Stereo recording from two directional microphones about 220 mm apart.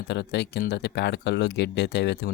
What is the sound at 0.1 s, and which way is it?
Speech, 50° left (ahead or behind).